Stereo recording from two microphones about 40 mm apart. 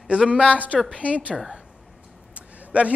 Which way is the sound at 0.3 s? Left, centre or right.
Right.